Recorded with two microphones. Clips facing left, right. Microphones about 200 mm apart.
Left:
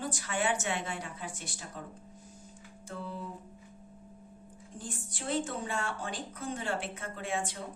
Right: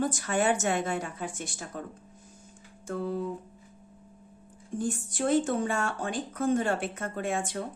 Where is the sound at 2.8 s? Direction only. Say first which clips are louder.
Right 9 dB; 50° right (ahead or behind).